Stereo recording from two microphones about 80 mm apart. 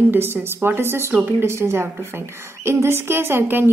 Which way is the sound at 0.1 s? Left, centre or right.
Right.